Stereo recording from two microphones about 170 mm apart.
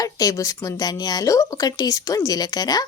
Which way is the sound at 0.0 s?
20° left (ahead or behind).